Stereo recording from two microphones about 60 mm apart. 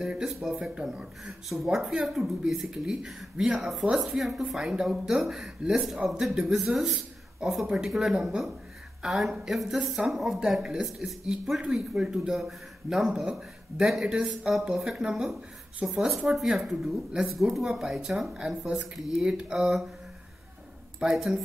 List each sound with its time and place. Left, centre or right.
0.0 s speech: centre
6.9 s a sound: centre
7.7 s speech: centre
21.1 s speech: centre